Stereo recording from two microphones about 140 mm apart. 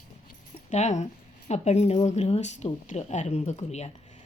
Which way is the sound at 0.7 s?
55° left (ahead or behind).